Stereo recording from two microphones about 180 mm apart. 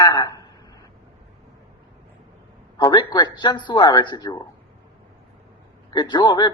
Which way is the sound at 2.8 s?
25° left (ahead or behind).